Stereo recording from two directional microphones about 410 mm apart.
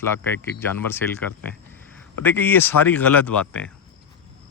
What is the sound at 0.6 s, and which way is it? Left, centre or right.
Speech, centre.